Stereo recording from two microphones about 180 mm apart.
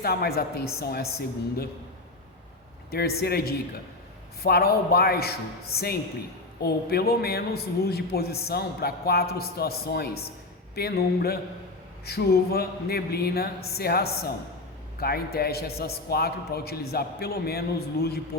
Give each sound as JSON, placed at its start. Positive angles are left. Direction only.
{"t": 0.0, "sound": "a man's voice", "side_deg": 60}
{"t": 2.9, "sound": "a man's voice", "side_deg": 60}